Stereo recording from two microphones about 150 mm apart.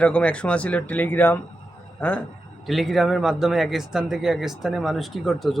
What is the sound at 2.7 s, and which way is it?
A man's voice, centre (ahead or behind).